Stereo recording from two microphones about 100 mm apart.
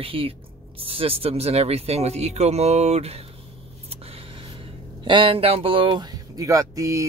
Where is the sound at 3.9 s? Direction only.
80° right.